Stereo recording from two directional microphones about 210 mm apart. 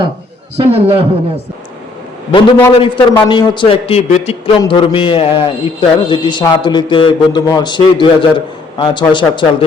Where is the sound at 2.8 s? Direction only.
25° left (ahead or behind).